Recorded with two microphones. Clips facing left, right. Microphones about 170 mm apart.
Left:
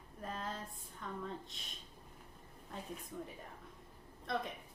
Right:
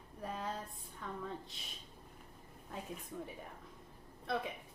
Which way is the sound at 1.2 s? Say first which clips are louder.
Even; 5° right (ahead or behind).